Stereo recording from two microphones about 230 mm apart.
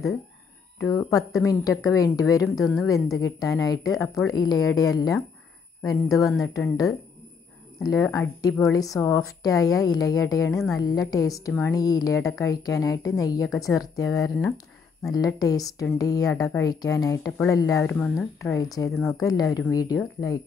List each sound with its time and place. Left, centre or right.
0.7 s a woman's voice: centre